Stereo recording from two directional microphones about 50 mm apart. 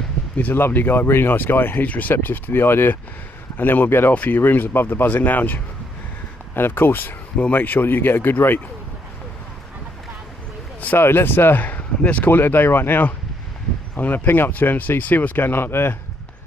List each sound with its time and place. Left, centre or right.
0.4 s speech: left
4.1 s speech: left
4.4 s speech: left
6.5 s speech: left
11.0 s speech: left
12.3 s speech: left